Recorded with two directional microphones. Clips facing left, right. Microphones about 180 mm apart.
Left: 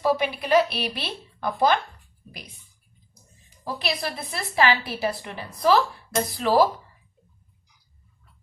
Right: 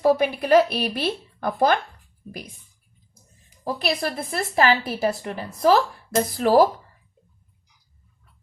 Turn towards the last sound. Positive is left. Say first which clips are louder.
# right 3 dB
turn(degrees=-45)  # may be behind; listen again after turning